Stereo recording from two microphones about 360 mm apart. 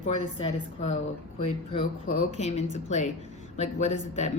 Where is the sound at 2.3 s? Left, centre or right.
Centre.